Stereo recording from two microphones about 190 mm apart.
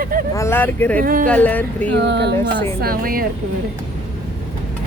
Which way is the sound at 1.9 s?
65° right (ahead or behind).